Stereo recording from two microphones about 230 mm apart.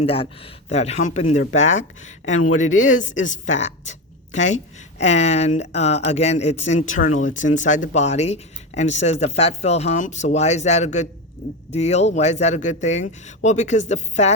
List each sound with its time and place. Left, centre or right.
0.0 s a woman's voice: left